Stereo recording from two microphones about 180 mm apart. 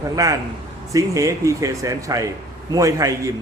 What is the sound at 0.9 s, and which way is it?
A man's voice, 15° right (ahead or behind).